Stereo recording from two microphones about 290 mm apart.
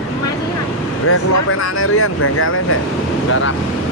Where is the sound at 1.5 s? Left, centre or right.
Left.